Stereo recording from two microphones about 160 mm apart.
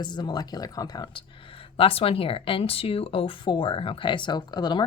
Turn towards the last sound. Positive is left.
turn(degrees=25)  # may be behind; listen again after turning